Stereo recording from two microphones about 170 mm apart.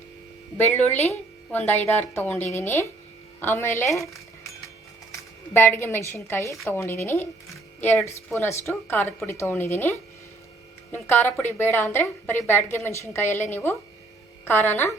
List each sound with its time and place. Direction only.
0.5 s a woman's voice: 10° left (ahead or behind)
5.5 s a woman's voice: 15° left (ahead or behind)